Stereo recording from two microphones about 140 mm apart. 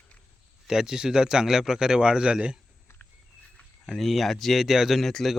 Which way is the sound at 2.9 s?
20° left (ahead or behind).